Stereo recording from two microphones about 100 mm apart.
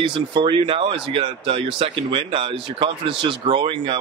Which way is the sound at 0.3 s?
60° right (ahead or behind).